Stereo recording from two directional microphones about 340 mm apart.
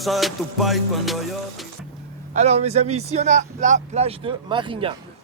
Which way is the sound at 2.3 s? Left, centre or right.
Centre.